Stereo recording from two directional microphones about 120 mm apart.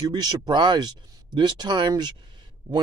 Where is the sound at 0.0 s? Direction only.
35° right (ahead or behind).